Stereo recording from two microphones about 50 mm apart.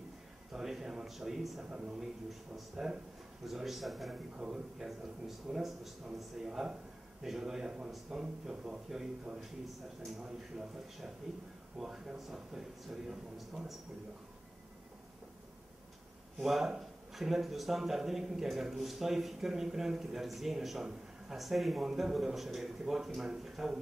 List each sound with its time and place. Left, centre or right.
0.5 s a man's voice: centre
1.7 s a man's voice: centre
16.3 s speech: centre